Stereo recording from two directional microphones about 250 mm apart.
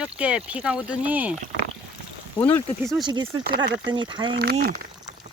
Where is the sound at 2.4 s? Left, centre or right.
Centre.